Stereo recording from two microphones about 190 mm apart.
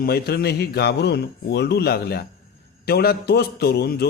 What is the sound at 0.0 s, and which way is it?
Speech, 55° left (ahead or behind).